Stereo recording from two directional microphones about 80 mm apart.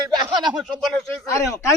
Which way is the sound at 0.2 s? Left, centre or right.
Right.